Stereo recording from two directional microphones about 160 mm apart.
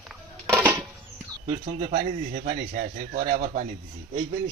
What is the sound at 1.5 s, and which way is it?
Speech, 50° right (ahead or behind).